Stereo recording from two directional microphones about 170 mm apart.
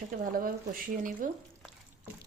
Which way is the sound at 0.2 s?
55° right (ahead or behind).